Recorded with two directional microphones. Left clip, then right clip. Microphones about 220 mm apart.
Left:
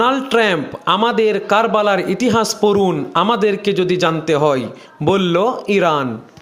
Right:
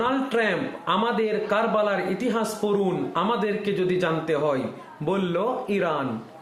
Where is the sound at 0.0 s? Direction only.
50° left (ahead or behind).